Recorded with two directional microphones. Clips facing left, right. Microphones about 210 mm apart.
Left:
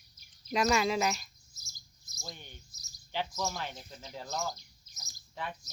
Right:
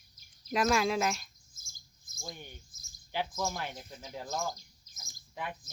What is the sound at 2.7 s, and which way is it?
Cricket, 50° right (ahead or behind).